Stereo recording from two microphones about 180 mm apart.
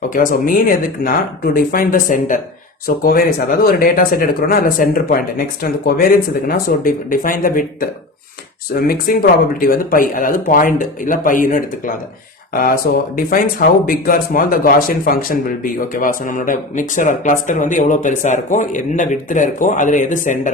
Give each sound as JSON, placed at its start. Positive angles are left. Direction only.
{"t": 0.1, "sound": "speech", "side_deg": 50}